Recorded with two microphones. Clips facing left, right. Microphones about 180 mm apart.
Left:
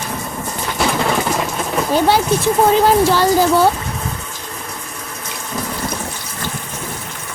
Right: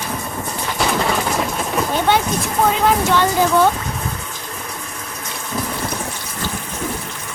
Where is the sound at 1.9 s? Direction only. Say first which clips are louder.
Left 5 dB; 35° left (ahead or behind).